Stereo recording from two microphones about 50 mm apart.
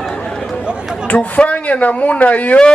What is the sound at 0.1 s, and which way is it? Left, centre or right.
Chatter, left.